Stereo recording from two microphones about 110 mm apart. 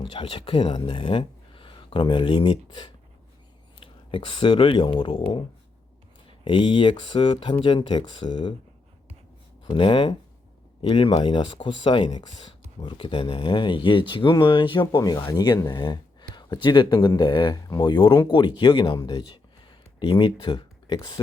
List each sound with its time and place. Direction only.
0.0 s speech: 60° left (ahead or behind)
9.6 s speech: 50° left (ahead or behind)
14.9 s speech: 35° left (ahead or behind)
20.0 s speech: 50° left (ahead or behind)